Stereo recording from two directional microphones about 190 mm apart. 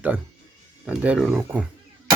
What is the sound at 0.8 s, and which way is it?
Speech, 5° right (ahead or behind).